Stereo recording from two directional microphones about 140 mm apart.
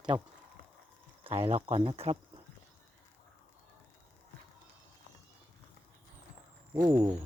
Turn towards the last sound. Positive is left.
turn(degrees=-35)  # may be behind; listen again after turning